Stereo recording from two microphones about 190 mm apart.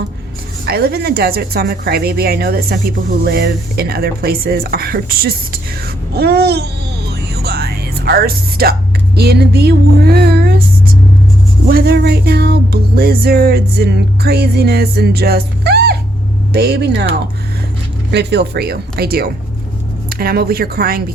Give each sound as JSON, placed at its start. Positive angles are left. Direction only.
{"t": 0.6, "sound": "a woman's voice", "side_deg": -55}
{"t": 7.4, "sound": "music", "side_deg": -55}
{"t": 9.1, "sound": "speech", "side_deg": -55}
{"t": 11.7, "sound": "music", "side_deg": -55}
{"t": 18.1, "sound": "music", "side_deg": -60}
{"t": 20.1, "sound": "a woman's voice", "side_deg": -50}